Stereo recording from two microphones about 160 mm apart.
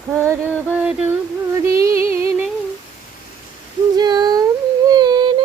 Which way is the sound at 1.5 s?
20° right (ahead or behind).